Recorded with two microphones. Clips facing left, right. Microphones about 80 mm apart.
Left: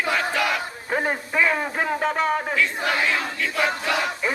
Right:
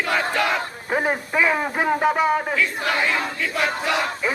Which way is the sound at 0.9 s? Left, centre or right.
Centre.